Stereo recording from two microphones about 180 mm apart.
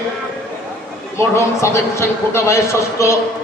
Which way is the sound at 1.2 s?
15° left (ahead or behind).